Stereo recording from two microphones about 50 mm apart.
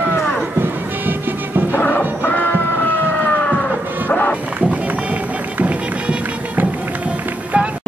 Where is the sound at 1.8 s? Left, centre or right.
Left.